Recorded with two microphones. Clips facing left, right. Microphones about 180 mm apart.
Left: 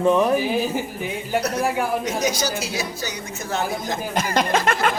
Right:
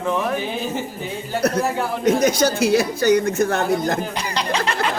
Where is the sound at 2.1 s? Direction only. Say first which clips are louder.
Right 7 dB; 55° right (ahead or behind).